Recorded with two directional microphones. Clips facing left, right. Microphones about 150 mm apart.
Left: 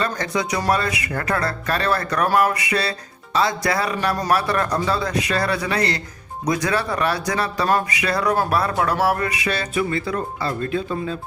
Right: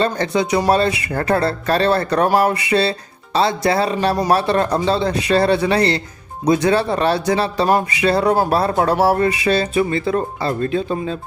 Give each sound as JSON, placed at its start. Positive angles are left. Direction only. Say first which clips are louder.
{"t": 0.0, "sound": "speech", "louder": "right 5 dB", "side_deg": -30}